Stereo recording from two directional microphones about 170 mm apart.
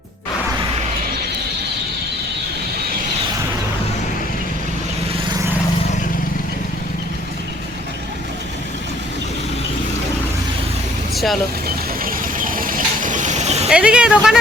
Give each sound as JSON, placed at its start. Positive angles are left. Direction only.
{"t": 11.1, "sound": "vehicle", "side_deg": 0}
{"t": 12.0, "sound": "vehicle", "side_deg": -55}
{"t": 13.7, "sound": "speech", "side_deg": -5}